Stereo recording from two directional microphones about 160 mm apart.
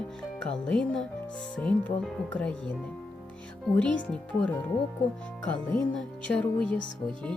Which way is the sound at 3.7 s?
5° left (ahead or behind).